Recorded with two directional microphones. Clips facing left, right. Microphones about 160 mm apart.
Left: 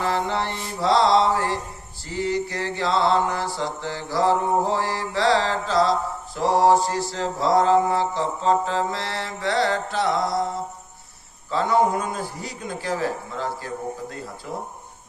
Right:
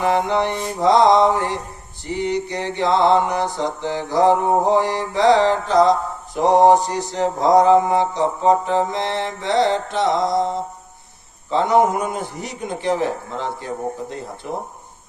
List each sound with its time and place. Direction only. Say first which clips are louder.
0.0 s mantra: right 6 dB; 15° right (ahead or behind)